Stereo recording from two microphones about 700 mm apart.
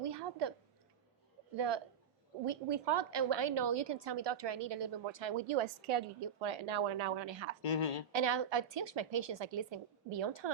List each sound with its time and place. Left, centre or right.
0.0 s a sound: right
1.5 s a woman's voice: right
7.6 s a woman's voice: left
8.1 s a woman's voice: right